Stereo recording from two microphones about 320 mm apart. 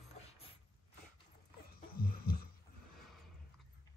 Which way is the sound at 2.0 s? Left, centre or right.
Left.